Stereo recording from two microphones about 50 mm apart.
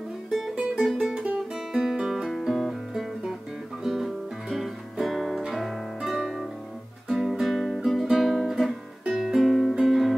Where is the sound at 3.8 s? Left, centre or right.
Centre.